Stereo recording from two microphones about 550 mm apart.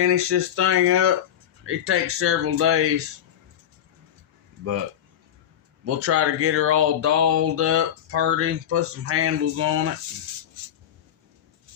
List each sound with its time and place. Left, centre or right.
0.0 s speech: right
5.8 s speech: right